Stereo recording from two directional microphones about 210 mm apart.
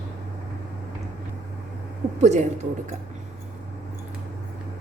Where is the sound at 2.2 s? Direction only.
35° right (ahead or behind).